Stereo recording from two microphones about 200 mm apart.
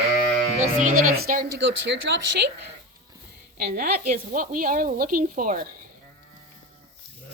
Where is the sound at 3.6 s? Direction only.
50° right (ahead or behind).